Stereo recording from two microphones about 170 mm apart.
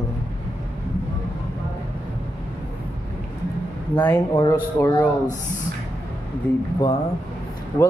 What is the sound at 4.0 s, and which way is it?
Speech, 15° left (ahead or behind).